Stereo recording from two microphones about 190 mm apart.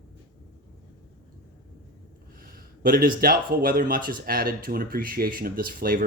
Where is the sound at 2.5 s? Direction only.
50° right (ahead or behind).